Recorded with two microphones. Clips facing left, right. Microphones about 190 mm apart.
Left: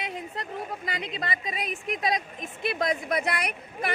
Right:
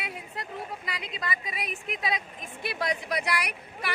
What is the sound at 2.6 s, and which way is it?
Speech, 25° left (ahead or behind).